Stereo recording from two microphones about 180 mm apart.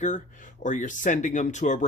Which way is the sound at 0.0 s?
45° left (ahead or behind).